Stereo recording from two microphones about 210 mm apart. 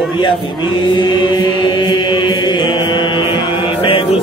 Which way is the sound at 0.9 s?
20° left (ahead or behind).